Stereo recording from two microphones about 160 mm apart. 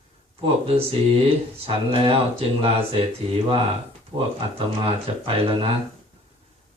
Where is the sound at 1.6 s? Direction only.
35° right (ahead or behind).